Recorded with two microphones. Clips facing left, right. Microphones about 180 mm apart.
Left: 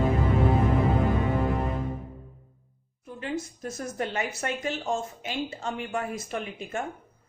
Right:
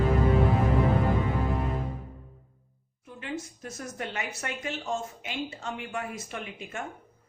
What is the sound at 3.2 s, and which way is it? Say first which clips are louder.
Speech: left 4 dB; 40° left (ahead or behind).